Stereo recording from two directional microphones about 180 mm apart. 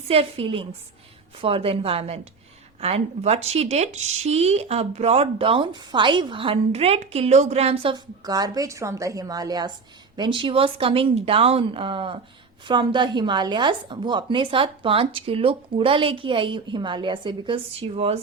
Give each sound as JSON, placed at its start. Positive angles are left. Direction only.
{"t": 0.1, "sound": "speech", "side_deg": -30}